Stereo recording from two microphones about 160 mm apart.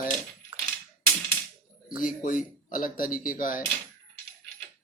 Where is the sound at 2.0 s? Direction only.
60° left (ahead or behind).